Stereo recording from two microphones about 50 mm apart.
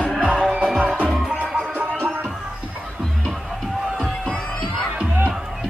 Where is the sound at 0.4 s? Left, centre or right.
Right.